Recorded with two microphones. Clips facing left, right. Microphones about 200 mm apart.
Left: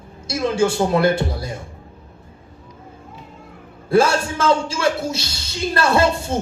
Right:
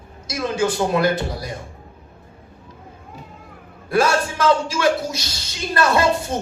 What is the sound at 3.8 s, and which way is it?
A man's voice, 25° left (ahead or behind).